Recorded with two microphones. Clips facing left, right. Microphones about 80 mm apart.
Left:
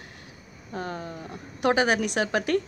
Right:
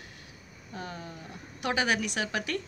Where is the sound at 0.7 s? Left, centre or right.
Left.